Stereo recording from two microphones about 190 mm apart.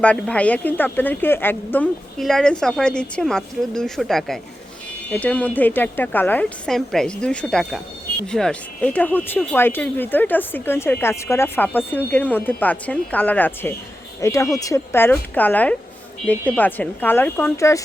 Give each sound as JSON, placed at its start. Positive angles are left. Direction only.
{"t": 0.0, "sound": "speech", "side_deg": 5}